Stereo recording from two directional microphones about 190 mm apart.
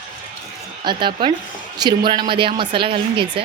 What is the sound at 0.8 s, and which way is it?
A woman's voice, 25° right (ahead or behind).